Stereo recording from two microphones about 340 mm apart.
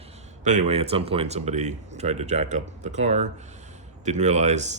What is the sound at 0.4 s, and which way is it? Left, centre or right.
Speech, centre.